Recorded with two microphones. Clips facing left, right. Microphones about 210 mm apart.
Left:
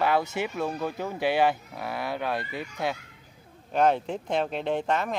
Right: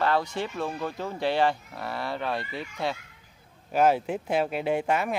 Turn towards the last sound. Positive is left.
turn(degrees=-10)  # may be behind; listen again after turning